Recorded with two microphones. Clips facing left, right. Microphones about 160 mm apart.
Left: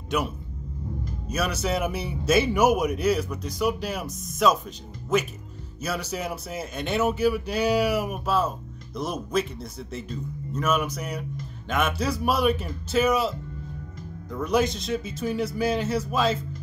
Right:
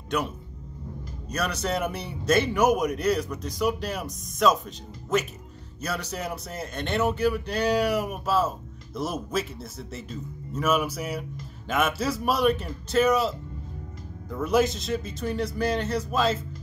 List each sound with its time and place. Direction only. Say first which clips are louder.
1.3 s speech: left 1 dB; 5° left (ahead or behind)